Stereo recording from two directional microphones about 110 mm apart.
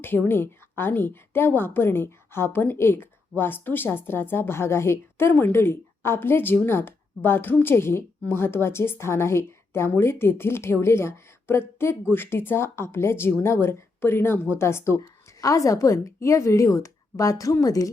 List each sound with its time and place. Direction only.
0.0 s a woman's voice: 20° left (ahead or behind)